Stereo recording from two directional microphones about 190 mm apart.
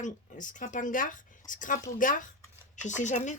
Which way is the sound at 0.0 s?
40° left (ahead or behind).